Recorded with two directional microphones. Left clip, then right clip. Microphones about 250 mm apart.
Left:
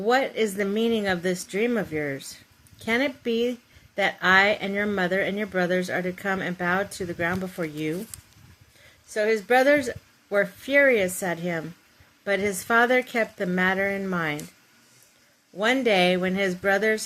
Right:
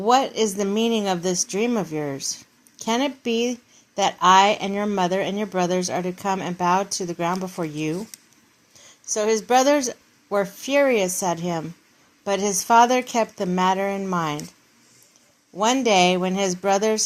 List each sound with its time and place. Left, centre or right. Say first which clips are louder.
0.0 s speech: right 4 dB; centre
9.1 s a woman's voice: right 2 dB; centre
15.5 s speech: right 3 dB; centre